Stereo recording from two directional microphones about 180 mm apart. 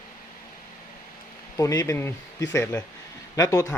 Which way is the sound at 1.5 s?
20° left (ahead or behind).